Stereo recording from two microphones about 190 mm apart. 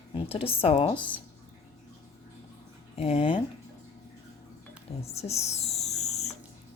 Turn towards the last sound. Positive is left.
turn(degrees=35)  # may be behind; listen again after turning